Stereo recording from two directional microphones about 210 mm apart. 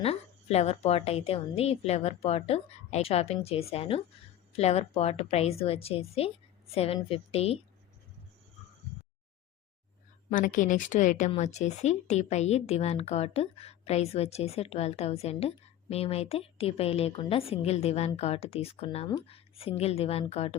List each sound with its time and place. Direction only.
0.0 s speech: 30° left (ahead or behind)
10.2 s a woman's voice: 40° left (ahead or behind)